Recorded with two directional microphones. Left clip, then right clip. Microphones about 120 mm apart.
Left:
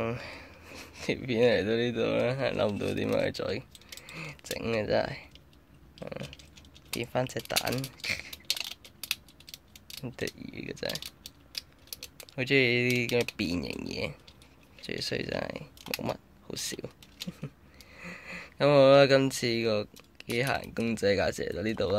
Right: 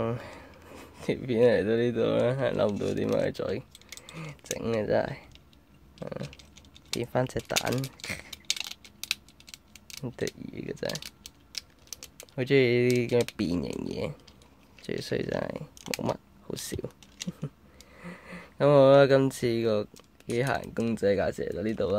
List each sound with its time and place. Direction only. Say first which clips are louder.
0.0 s a sound: right 1 dB; 30° right (ahead or behind)
0.7 s speech: right 1 dB; 30° right (ahead or behind)
5.9 s a sound: right 2 dB; 20° right (ahead or behind)
7.0 s speech: right 2 dB; 35° right (ahead or behind)
7.3 s speech: right 2 dB; 15° right (ahead or behind)
8.5 s mechanisms: right 1 dB; 15° right (ahead or behind)
10.4 s speech: right 2 dB; 30° right (ahead or behind)
10.9 s typing: right 1 dB; 5° right (ahead or behind)
12.4 s speech: right 2 dB; 30° right (ahead or behind)